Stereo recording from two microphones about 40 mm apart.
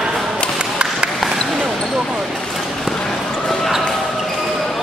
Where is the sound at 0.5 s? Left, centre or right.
Right.